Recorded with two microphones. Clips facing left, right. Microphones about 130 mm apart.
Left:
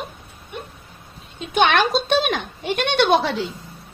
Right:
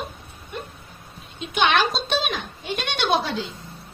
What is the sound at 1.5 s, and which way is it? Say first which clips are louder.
Speech: left 3 dB; 55° left (ahead or behind).